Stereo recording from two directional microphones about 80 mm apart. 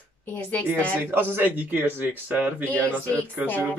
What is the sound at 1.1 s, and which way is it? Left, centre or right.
Speech, right.